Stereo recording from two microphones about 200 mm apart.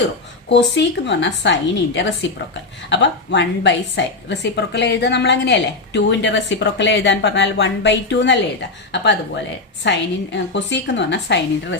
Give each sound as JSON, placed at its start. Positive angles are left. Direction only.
{"t": 0.4, "sound": "a woman's voice", "side_deg": 60}